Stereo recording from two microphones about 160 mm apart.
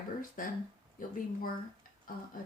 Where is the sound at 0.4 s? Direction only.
60° left (ahead or behind).